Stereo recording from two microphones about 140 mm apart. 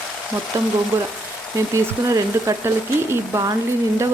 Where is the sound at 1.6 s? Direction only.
20° right (ahead or behind).